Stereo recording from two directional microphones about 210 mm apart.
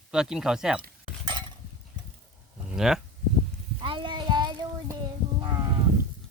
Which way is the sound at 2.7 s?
Centre (ahead or behind).